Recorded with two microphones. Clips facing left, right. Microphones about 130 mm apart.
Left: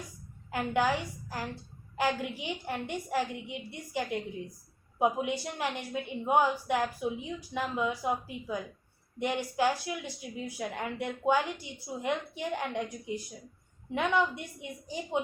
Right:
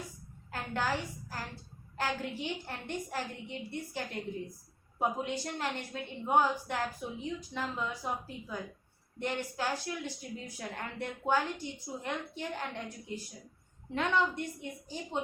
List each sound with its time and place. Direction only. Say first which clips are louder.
0.5 s a woman's voice: left 5 dB; 15° left (ahead or behind)